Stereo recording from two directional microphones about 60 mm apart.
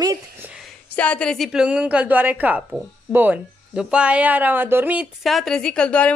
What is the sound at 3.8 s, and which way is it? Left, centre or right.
Speech, centre.